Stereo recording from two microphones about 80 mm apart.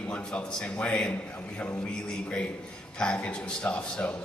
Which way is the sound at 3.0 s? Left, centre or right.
Centre.